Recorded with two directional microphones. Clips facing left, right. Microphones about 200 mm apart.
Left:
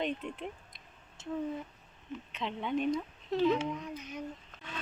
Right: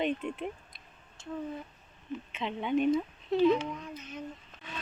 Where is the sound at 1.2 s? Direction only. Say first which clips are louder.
Left 2 dB; 20° left (ahead or behind).